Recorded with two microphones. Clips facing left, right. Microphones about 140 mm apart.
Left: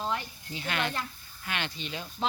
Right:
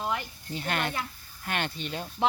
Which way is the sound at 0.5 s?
45° right (ahead or behind).